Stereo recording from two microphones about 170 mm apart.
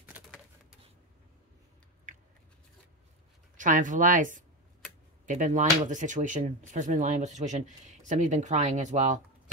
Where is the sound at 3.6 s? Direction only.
50° right (ahead or behind).